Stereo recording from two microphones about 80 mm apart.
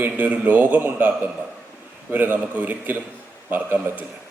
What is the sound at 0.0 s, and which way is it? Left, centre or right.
A man's voice, right.